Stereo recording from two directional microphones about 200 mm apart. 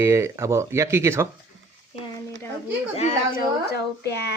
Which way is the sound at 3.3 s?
55° left (ahead or behind).